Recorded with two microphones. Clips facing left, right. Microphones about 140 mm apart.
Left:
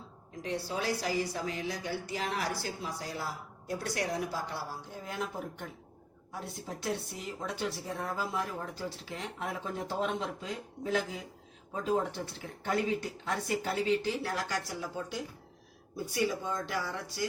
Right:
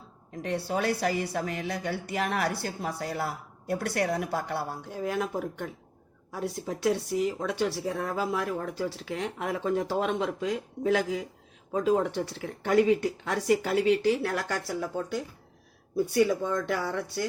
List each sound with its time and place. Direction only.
0.4 s speech: 60° right (ahead or behind)
7.3 s speech: 75° right (ahead or behind); by 17.2 s 60° right (ahead or behind)